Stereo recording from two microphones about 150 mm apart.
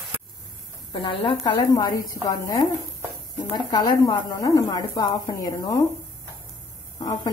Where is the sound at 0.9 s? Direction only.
30° left (ahead or behind).